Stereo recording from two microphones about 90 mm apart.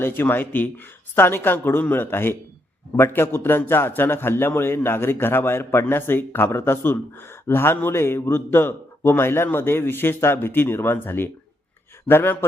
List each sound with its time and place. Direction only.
0.0 s a man's voice: 20° left (ahead or behind)